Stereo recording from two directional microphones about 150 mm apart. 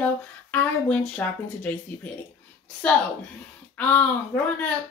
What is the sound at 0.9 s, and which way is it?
Speech, 10° left (ahead or behind).